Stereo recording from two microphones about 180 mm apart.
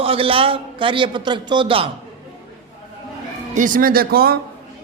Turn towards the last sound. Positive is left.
turn(degrees=-55)  # may be behind; listen again after turning